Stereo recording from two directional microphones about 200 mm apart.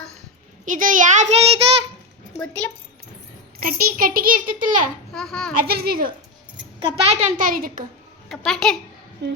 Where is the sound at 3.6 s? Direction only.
45° right (ahead or behind).